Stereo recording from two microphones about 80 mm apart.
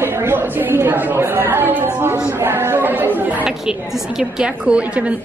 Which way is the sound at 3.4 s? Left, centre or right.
Centre.